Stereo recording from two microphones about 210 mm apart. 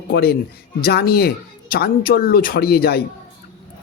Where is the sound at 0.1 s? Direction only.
50° left (ahead or behind).